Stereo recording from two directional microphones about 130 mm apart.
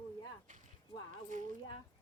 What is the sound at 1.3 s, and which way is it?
Speech, 75° right (ahead or behind).